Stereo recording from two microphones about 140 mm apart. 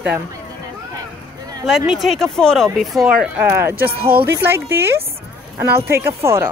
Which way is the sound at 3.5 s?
15° right (ahead or behind).